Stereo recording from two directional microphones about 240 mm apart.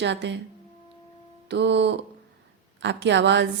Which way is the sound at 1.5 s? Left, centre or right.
Right.